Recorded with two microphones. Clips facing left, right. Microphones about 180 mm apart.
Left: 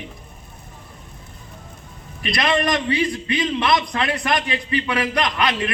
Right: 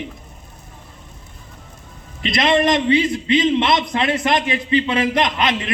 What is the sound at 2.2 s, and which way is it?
A man's voice, 25° right (ahead or behind).